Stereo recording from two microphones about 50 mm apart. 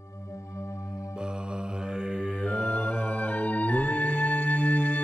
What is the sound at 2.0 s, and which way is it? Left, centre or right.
Mantra, centre.